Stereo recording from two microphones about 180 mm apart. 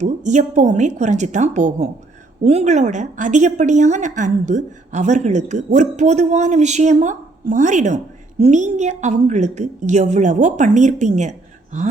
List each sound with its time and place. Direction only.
0.0 s a woman's voice: 40° right (ahead or behind)